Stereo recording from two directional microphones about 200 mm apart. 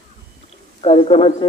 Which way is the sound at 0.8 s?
30° left (ahead or behind).